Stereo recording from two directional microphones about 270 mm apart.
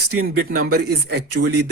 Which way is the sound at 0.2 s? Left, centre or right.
Right.